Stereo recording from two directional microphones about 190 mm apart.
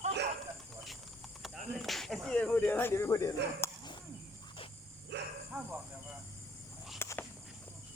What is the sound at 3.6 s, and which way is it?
Cricket, 15° left (ahead or behind).